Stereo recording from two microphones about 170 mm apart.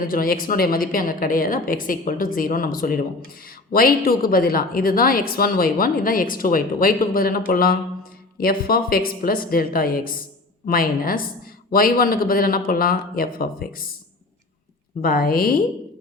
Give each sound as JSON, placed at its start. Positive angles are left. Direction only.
{"t": 0.0, "sound": "a woman's voice", "side_deg": 55}
{"t": 15.0, "sound": "a woman's voice", "side_deg": 60}